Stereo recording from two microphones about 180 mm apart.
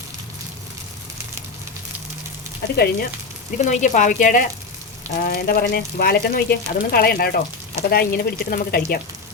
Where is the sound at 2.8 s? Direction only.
55° left (ahead or behind).